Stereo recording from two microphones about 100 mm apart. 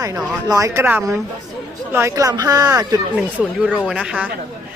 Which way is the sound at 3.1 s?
10° right (ahead or behind).